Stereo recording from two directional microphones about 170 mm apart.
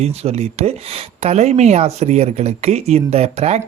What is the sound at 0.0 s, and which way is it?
Speech, 40° right (ahead or behind).